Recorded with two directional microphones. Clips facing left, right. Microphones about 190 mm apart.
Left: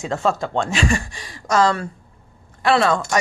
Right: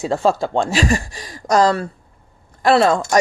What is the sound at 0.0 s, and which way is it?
Speech, 35° right (ahead or behind).